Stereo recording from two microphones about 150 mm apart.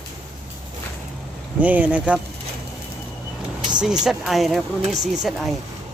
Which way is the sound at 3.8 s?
5° right (ahead or behind).